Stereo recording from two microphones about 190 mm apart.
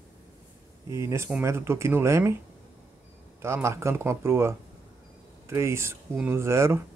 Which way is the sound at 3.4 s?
15° right (ahead or behind).